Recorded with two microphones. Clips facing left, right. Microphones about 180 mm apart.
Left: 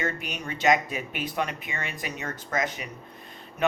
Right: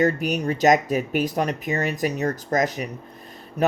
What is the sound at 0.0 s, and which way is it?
Speech, 40° right (ahead or behind).